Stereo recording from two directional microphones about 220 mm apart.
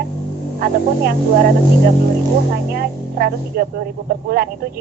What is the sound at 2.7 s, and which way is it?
Speech, 45° right (ahead or behind).